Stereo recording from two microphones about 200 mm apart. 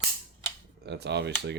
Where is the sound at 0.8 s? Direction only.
55° right (ahead or behind).